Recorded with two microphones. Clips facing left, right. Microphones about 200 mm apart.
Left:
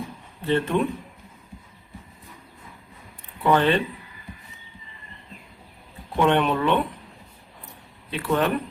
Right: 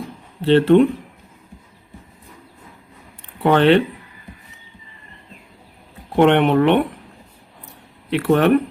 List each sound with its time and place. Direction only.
0.4 s speech: 80° right
3.4 s speech: 70° right (ahead or behind)
6.1 s speech: 65° right (ahead or behind)
8.1 s speech: 65° right (ahead or behind)